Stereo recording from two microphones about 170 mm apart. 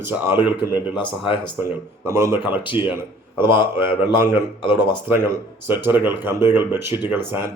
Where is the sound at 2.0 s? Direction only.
15° right (ahead or behind).